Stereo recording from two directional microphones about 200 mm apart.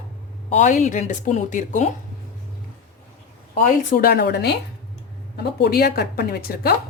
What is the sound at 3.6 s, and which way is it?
A woman's voice, 45° left (ahead or behind).